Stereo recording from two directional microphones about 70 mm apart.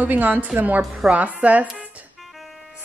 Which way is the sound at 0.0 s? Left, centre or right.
Right.